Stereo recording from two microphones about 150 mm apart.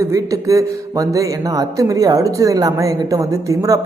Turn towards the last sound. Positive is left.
turn(degrees=-20)  # may be behind; listen again after turning